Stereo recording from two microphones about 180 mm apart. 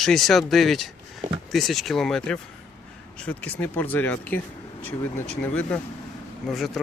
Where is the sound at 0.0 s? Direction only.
Centre (ahead or behind).